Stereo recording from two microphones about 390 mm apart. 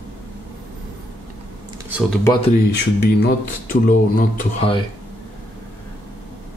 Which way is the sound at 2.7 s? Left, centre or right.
Left.